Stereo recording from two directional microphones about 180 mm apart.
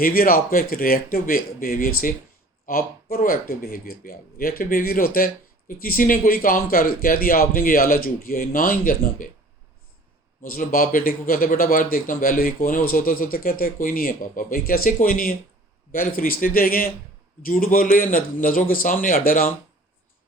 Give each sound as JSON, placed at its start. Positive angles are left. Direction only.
{"t": 0.0, "sound": "speech", "side_deg": 55}
{"t": 10.4, "sound": "speech", "side_deg": 50}